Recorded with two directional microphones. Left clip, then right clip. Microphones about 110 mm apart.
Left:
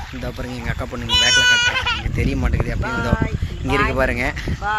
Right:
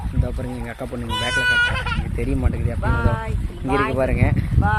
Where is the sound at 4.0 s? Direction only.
Centre (ahead or behind).